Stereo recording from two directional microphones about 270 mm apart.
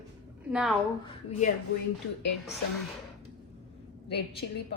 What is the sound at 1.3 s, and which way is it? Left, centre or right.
Speech, left.